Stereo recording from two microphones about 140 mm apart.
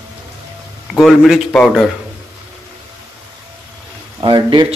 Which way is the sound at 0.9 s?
Centre (ahead or behind).